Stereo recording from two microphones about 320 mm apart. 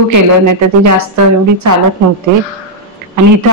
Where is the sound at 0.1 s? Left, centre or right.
Right.